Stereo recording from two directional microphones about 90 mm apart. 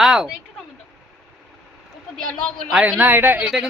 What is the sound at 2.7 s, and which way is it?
Speech, 10° right (ahead or behind).